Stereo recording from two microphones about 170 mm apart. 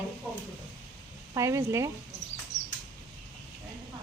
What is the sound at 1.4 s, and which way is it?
Speech, 20° right (ahead or behind).